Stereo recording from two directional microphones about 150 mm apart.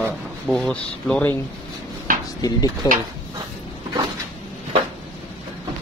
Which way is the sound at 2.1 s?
65° right (ahead or behind).